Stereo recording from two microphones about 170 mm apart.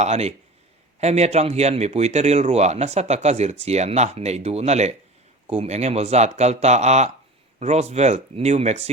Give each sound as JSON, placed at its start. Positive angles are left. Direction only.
{"t": 0.0, "sound": "speech", "side_deg": -40}